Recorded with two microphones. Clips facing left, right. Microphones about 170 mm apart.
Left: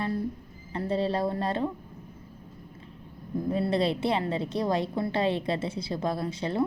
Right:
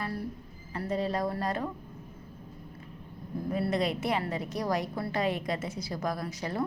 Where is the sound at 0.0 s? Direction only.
20° left (ahead or behind).